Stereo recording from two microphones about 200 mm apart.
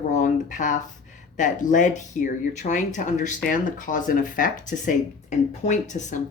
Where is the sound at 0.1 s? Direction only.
40° left (ahead or behind).